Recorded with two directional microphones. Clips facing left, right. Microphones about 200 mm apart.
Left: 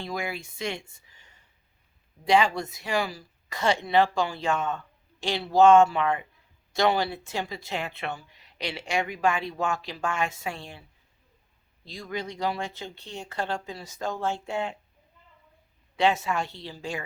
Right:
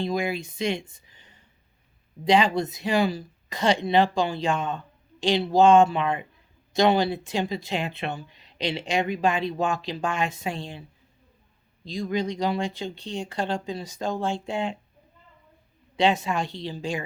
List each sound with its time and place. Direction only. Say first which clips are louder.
0.0 s speech: right 6 dB; 20° right (ahead or behind)
11.9 s speech: right 7 dB; 15° right (ahead or behind)
16.0 s speech: right 2 dB; 15° right (ahead or behind)